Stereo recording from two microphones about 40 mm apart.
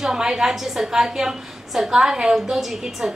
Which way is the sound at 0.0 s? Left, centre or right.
Centre.